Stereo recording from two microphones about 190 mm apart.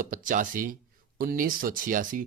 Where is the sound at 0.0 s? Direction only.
45° right (ahead or behind).